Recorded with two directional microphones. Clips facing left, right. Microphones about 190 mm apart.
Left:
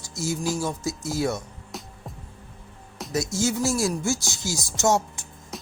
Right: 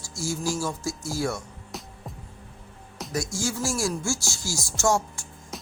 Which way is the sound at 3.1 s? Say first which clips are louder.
Left 4 dB; 20° left (ahead or behind).